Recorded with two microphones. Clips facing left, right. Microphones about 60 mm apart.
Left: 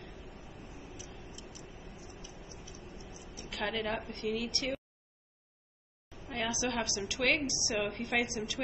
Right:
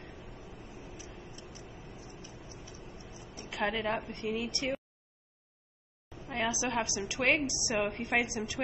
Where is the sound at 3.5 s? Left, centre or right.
Centre.